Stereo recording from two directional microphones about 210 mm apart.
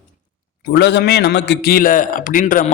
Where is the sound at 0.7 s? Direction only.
55° left (ahead or behind).